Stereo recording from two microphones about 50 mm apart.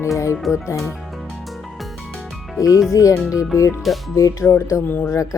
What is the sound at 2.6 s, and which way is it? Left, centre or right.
Speech, left.